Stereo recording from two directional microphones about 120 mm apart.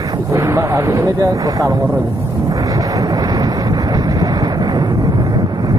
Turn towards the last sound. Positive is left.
turn(degrees=-35)  # may be behind; listen again after turning